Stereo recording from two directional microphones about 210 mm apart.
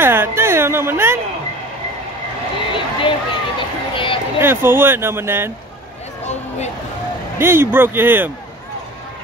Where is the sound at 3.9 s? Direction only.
25° left (ahead or behind).